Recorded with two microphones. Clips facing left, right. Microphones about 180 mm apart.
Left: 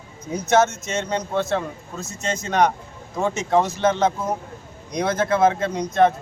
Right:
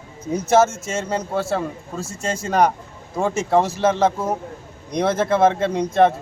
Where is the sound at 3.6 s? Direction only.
30° right (ahead or behind).